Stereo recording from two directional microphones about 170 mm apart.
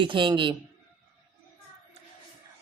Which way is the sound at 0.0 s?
30° right (ahead or behind).